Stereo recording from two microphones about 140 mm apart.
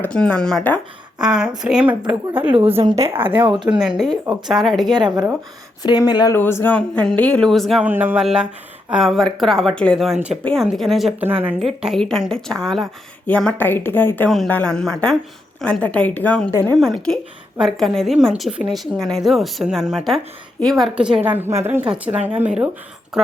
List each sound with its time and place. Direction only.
0.0 s speech: 10° left (ahead or behind)
1.2 s a woman's voice: 5° right (ahead or behind)
2.5 s a woman's voice: 45° right (ahead or behind)
3.7 s a woman's voice: 5° right (ahead or behind)
4.9 s speech: 30° right (ahead or behind)
5.8 s speech: 30° left (ahead or behind)
6.3 s speech: 15° left (ahead or behind)
7.9 s a woman's voice: 10° right (ahead or behind)
11.2 s a woman's voice: 10° right (ahead or behind); by 14.3 s 15° left (ahead or behind)
14.3 s a woman's voice: centre (ahead or behind)